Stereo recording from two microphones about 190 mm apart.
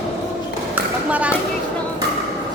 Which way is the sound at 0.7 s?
5° right (ahead or behind).